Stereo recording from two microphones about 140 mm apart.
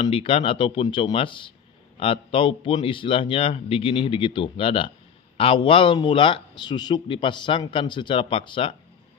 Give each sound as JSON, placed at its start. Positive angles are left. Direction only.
{"t": 0.0, "sound": "speech", "side_deg": 40}